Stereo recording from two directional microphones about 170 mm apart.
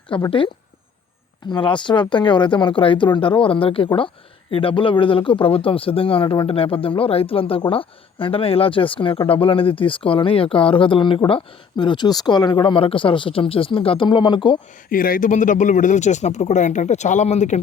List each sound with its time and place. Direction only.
0.3 s a man's voice: 30° left (ahead or behind)
14.8 s speech: 55° left (ahead or behind)